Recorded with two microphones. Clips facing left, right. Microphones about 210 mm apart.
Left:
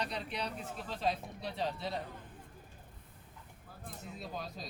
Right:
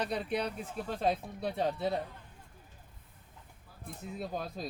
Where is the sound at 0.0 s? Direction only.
50° right (ahead or behind).